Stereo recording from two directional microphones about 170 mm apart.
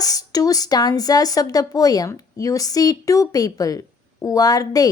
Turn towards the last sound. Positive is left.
turn(degrees=20)  # may be behind; listen again after turning